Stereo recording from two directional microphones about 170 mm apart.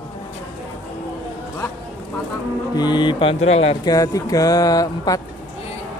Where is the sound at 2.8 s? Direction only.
25° left (ahead or behind).